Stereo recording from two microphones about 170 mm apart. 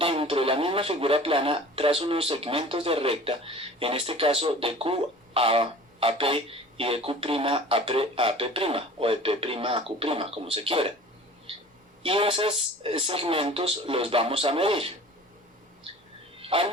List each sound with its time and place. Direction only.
0.0 s speech: 35° right (ahead or behind)
12.0 s speech: 30° right (ahead or behind)
16.4 s speech: 35° right (ahead or behind)